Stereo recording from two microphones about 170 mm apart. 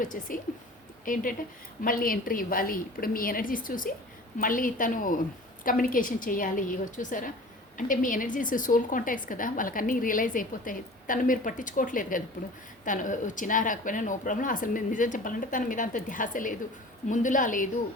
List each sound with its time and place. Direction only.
0.0 s a woman's voice: 50° left (ahead or behind)